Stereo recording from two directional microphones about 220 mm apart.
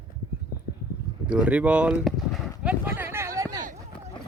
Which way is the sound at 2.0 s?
Centre (ahead or behind).